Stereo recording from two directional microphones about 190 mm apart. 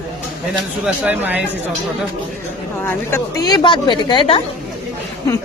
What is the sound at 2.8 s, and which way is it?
A woman's voice, 10° left (ahead or behind).